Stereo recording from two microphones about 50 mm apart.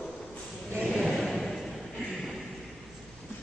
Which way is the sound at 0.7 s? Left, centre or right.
Centre.